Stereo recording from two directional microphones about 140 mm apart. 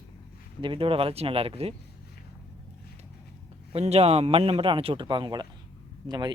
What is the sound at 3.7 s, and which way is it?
A man's voice, 45° right (ahead or behind).